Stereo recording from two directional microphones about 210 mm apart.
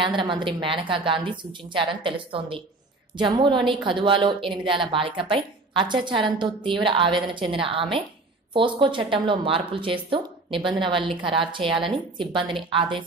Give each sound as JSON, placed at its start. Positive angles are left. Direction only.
{"t": 0.0, "sound": "speech", "side_deg": -25}